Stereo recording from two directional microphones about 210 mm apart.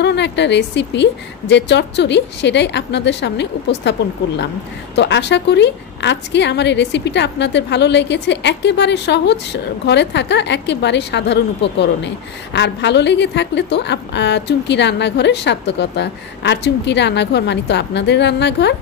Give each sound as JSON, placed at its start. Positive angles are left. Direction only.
{"t": 0.0, "sound": "a woman's voice", "side_deg": 55}
{"t": 4.9, "sound": "a woman's voice", "side_deg": 55}